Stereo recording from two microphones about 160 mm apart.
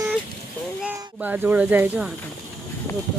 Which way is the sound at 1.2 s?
10° right (ahead or behind).